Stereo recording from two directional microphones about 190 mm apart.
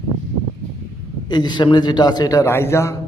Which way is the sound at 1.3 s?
25° left (ahead or behind).